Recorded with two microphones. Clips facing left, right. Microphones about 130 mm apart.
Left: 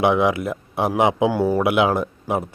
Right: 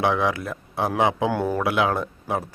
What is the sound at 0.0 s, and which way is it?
Speech, 20° left (ahead or behind).